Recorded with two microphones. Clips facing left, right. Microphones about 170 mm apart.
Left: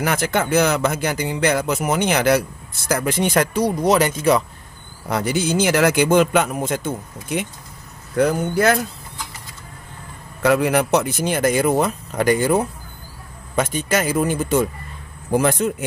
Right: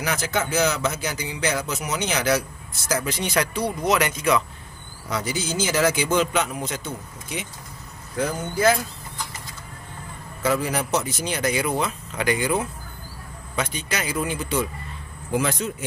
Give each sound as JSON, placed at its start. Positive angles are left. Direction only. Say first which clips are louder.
{"t": 0.0, "sound": "speech", "louder": "left 5 dB", "side_deg": 55}
{"t": 5.1, "sound": "speech", "louder": "left 7 dB", "side_deg": 60}
{"t": 10.4, "sound": "speech", "louder": "left 7 dB", "side_deg": 65}